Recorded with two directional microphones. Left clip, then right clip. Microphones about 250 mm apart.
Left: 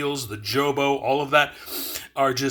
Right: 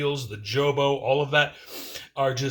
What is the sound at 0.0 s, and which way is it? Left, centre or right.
Speech, left.